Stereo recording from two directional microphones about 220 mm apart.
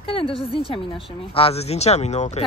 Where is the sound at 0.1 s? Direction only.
25° left (ahead or behind).